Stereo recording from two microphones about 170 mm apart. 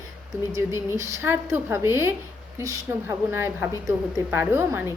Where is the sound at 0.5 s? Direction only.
15° right (ahead or behind).